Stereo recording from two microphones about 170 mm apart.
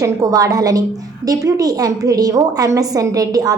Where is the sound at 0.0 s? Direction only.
20° right (ahead or behind).